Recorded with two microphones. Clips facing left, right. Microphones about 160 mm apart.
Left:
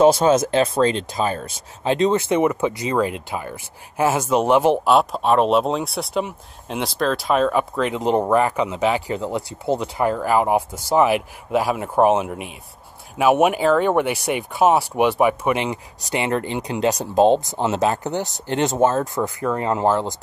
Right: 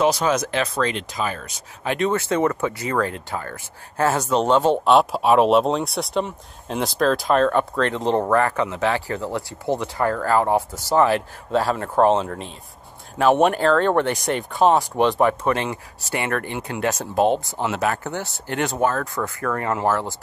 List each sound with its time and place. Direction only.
0.0 s speech: 25° left (ahead or behind); by 4.9 s 10° left (ahead or behind)
4.9 s speech: 5° right (ahead or behind); by 20.2 s 20° left (ahead or behind)